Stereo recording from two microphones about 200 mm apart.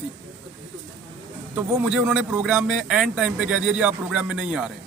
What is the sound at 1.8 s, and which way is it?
A man's voice, 5° right (ahead or behind).